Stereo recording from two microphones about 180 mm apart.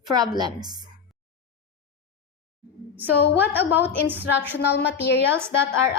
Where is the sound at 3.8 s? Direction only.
10° right (ahead or behind).